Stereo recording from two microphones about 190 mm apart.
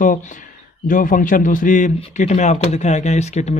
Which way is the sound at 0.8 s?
45° left (ahead or behind).